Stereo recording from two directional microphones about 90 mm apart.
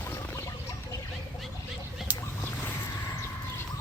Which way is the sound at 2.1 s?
20° right (ahead or behind).